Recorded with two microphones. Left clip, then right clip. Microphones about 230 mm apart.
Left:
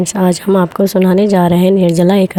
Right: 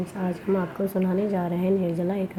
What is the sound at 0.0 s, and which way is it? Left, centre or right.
A woman's voice, left.